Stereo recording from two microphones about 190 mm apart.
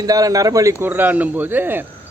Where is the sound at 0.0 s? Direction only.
20° right (ahead or behind).